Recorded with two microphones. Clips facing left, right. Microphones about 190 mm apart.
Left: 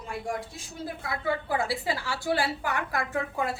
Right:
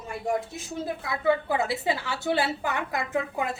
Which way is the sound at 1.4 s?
20° right (ahead or behind).